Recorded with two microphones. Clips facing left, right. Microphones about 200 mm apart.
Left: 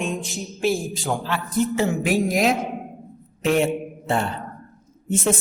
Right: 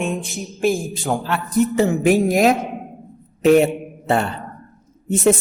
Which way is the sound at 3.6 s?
65° right (ahead or behind).